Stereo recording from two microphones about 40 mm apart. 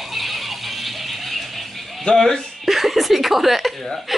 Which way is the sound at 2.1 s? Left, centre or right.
Left.